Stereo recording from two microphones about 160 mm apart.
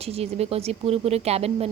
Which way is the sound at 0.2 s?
40° right (ahead or behind).